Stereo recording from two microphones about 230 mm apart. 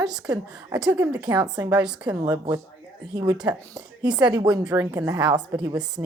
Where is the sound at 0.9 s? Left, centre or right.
Centre.